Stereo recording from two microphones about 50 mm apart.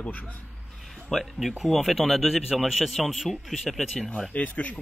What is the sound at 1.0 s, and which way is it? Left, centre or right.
Speech, centre.